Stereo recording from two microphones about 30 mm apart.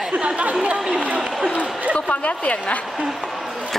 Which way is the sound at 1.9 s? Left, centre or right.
Left.